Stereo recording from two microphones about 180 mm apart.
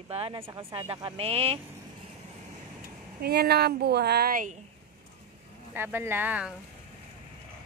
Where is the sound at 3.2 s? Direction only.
60° right (ahead or behind).